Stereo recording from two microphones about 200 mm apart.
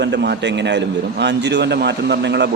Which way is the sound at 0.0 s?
60° right (ahead or behind).